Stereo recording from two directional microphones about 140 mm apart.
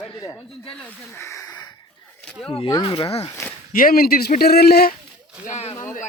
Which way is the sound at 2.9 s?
40° left (ahead or behind).